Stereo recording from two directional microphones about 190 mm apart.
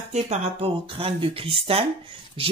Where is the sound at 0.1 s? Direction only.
35° right (ahead or behind).